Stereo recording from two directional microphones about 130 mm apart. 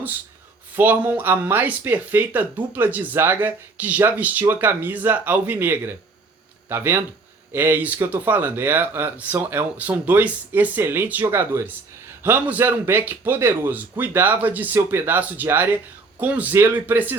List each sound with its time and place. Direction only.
0.8 s speech: 15° right (ahead or behind)